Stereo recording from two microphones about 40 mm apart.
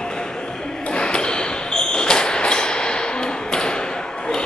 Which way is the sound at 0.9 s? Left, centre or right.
Left.